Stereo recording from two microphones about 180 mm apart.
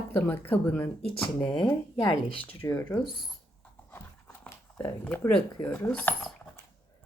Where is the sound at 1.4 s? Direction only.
25° left (ahead or behind).